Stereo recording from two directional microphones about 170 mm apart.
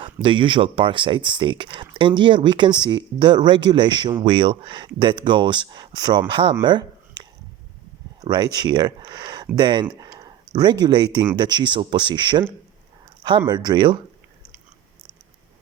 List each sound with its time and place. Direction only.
0.0 s speech: 30° right (ahead or behind)
13.5 s speech: 25° right (ahead or behind)